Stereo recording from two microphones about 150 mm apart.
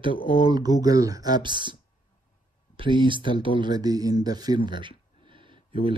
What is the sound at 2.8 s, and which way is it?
Speech, 35° right (ahead or behind).